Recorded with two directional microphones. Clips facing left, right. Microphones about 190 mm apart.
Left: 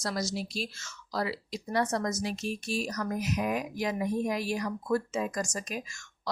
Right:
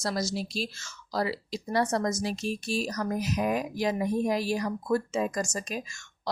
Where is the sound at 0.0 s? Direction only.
30° right (ahead or behind).